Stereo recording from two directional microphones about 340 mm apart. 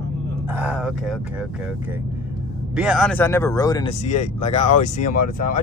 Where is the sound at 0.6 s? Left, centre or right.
Centre.